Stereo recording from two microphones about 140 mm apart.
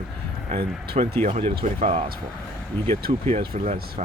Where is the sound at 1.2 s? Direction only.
45° right (ahead or behind).